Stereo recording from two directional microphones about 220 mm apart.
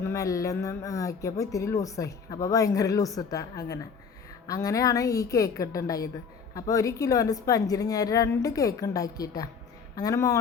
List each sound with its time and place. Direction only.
0.0 s speech: 15° left (ahead or behind)